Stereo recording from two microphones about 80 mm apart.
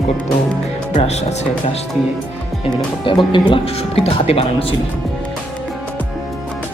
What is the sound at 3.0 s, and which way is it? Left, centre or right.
Speech, left.